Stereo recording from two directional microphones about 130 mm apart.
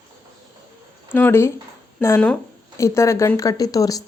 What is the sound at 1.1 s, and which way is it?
Speech, 15° left (ahead or behind).